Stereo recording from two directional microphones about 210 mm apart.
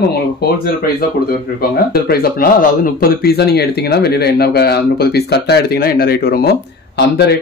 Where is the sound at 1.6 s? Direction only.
45° left (ahead or behind).